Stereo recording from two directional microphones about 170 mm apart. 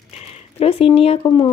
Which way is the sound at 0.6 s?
35° left (ahead or behind).